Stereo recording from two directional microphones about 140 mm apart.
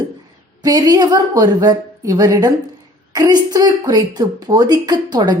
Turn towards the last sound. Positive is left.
turn(degrees=-30)  # may be behind; listen again after turning